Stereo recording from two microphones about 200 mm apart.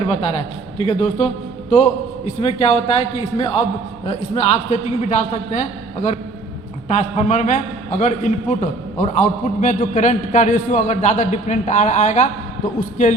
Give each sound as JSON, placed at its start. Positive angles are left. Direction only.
{"t": 0.0, "sound": "a man's voice", "side_deg": 30}